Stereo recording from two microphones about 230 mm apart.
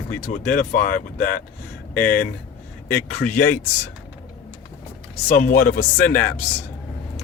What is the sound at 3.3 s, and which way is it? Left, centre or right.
Speech, left.